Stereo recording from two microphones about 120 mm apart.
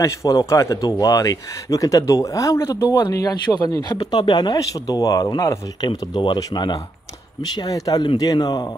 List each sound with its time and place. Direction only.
0.0 s speech: 25° left (ahead or behind)